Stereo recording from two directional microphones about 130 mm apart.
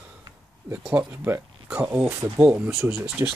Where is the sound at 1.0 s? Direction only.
20° right (ahead or behind).